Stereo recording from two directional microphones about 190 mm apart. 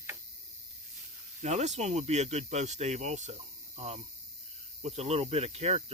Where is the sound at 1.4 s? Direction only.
35° right (ahead or behind).